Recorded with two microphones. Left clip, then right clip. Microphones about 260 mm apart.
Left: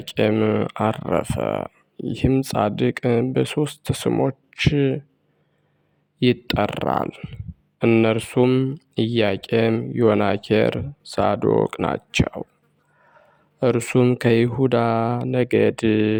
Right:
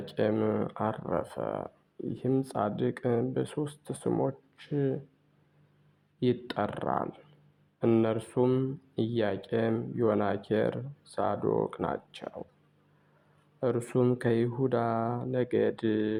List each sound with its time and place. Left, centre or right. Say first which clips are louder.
0.0 s speech: left 9 dB; left
6.1 s speech: left 10 dB; left
13.6 s speech: left 10 dB; left